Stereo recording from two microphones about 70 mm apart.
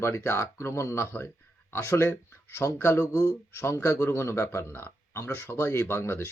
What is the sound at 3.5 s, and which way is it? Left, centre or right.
Speech, left.